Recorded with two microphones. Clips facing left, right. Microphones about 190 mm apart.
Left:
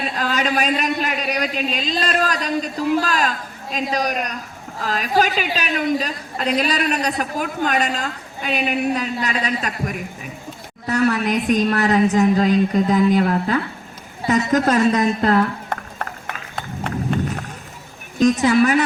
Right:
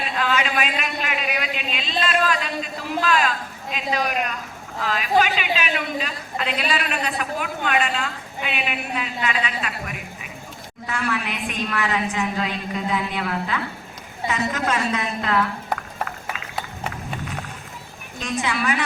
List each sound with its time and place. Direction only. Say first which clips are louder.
0.0 s a woman's voice: left 2 dB; 40° left (ahead or behind)
15.7 s a sound: even; 5° right (ahead or behind)
18.2 s a woman's voice: left 11 dB; 40° left (ahead or behind)